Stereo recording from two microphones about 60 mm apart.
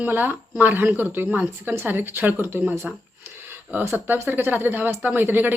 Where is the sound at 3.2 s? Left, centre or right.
Right.